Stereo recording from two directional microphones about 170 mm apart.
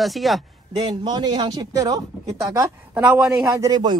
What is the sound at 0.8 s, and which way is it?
Speech, 25° right (ahead or behind).